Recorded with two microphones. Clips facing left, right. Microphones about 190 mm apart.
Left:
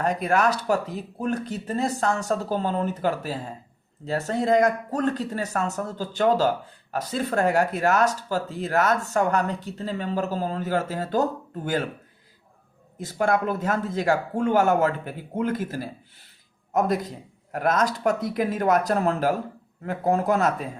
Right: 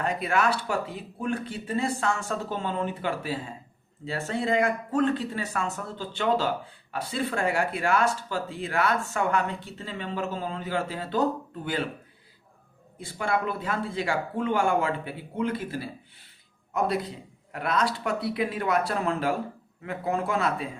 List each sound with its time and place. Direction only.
0.0 s speech: 45° left (ahead or behind)
13.0 s speech: 45° left (ahead or behind)